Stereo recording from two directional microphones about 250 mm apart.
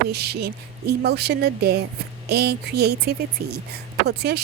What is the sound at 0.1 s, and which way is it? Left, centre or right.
Speech, right.